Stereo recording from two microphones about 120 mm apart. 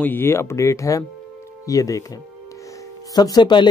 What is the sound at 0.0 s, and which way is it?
Speech, 15° left (ahead or behind).